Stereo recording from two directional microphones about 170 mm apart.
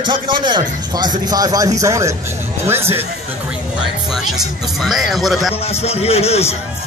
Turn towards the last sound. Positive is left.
turn(degrees=35)  # may be behind; listen again after turning